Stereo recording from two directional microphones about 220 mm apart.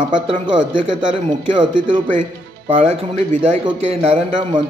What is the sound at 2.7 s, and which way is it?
Speech, 30° right (ahead or behind).